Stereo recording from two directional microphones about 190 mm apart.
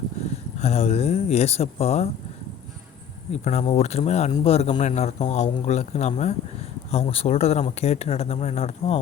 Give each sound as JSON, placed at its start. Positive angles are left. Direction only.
{"t": 0.6, "sound": "a man's voice", "side_deg": 35}
{"t": 3.3, "sound": "a man's voice", "side_deg": 35}